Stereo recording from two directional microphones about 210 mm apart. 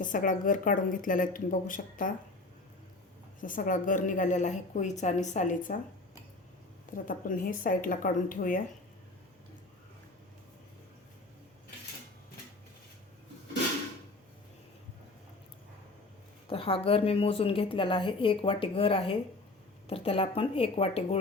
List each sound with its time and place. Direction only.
0.0 s a woman's voice: 40° left (ahead or behind)
3.4 s a woman's voice: 40° left (ahead or behind)
6.9 s a woman's voice: 40° left (ahead or behind)
16.5 s a woman's voice: 25° left (ahead or behind)